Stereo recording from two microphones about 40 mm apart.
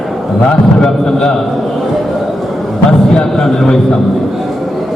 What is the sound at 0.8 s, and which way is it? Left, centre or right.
Speech, centre.